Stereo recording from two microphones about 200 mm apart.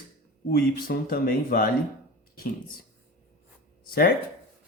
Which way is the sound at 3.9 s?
50° left (ahead or behind).